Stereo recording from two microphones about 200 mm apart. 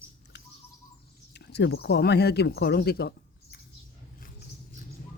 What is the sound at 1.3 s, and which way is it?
Speech, 60° left (ahead or behind).